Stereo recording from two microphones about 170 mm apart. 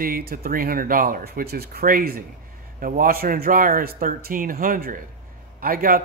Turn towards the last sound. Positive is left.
turn(degrees=-55)  # may be behind; listen again after turning